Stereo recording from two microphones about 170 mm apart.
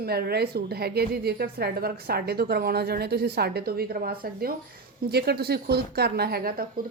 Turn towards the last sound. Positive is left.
turn(degrees=-65)  # may be behind; listen again after turning